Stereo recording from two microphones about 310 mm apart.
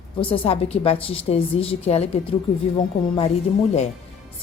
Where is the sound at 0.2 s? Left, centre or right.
Centre.